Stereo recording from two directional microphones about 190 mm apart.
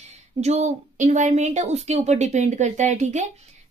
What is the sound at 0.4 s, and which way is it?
Speech, 35° right (ahead or behind).